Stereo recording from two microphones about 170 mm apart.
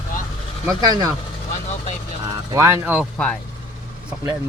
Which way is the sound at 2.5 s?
15° right (ahead or behind).